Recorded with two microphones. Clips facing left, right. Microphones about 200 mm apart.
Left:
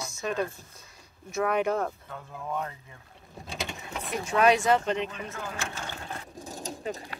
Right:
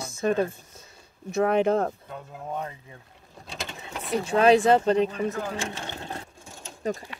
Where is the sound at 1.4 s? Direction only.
30° right (ahead or behind).